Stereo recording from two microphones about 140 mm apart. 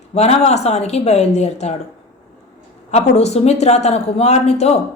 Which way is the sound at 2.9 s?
50° left (ahead or behind).